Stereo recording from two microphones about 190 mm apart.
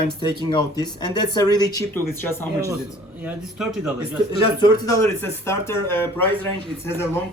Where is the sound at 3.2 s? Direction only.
Centre (ahead or behind).